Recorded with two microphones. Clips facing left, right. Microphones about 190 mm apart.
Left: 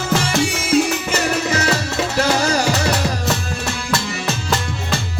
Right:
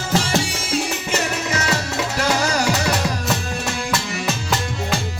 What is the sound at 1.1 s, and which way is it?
Music, 35° left (ahead or behind).